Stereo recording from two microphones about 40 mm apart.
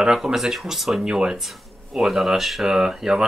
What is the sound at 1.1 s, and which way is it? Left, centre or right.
Speech, right.